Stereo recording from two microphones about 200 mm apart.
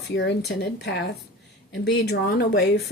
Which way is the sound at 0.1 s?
60° left (ahead or behind).